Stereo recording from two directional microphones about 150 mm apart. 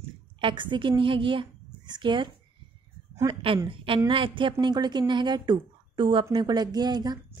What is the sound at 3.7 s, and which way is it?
A woman's voice, 35° right (ahead or behind).